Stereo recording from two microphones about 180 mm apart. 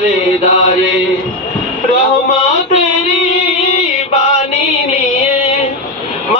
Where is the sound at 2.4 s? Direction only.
40° left (ahead or behind).